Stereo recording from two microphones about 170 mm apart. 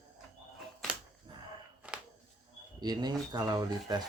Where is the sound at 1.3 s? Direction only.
30° right (ahead or behind).